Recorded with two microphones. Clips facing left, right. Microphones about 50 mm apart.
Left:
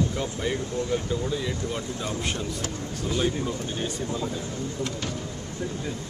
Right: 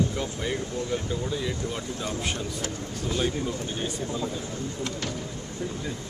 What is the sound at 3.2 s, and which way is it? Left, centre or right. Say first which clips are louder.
Speech: left 1 dB; centre.